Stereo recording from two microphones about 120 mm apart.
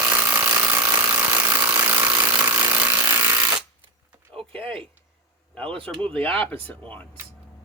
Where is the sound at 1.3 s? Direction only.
25° right (ahead or behind).